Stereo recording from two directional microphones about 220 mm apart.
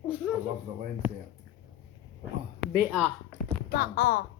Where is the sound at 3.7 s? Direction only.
40° left (ahead or behind).